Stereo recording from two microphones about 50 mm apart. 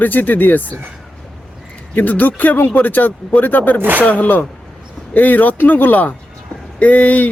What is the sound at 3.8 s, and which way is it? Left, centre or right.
Speech, right.